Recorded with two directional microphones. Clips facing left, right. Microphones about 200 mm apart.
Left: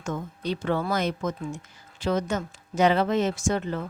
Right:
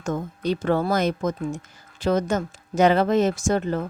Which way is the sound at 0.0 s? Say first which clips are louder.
Right 5 dB; 40° right (ahead or behind).